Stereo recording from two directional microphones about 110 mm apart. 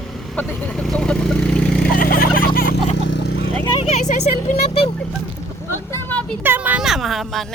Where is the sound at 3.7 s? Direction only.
75° left (ahead or behind).